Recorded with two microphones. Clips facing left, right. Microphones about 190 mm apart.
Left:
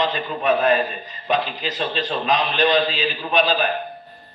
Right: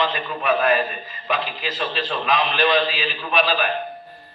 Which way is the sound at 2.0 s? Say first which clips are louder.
Even; 25° left (ahead or behind).